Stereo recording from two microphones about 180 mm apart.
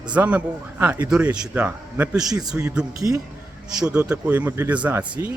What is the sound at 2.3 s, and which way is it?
Speech, 20° right (ahead or behind).